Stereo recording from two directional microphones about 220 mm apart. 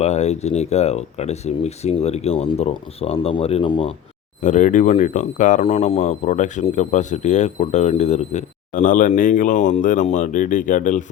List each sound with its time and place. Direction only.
0.0 s speech: 30° left (ahead or behind)
4.4 s speech: 35° left (ahead or behind)